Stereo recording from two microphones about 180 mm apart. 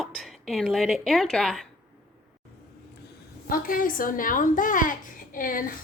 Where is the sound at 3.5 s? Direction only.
50° left (ahead or behind).